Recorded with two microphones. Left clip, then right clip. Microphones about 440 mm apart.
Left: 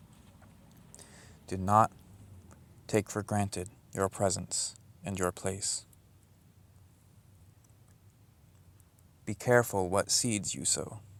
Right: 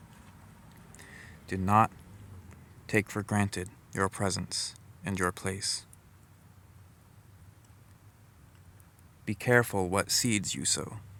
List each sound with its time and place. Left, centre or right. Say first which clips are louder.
0.9 s a sound: right 6 dB; left
2.5 s speech: right 1 dB; left
9.2 s speech: right 1 dB; left